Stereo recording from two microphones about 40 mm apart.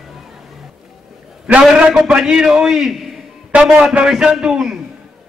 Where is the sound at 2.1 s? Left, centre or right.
Centre.